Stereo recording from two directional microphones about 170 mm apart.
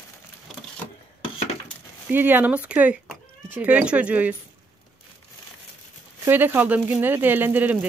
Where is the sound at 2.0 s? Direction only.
10° right (ahead or behind).